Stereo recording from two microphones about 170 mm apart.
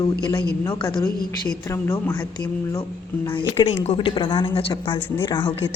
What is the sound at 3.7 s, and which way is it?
A woman's voice, 35° left (ahead or behind).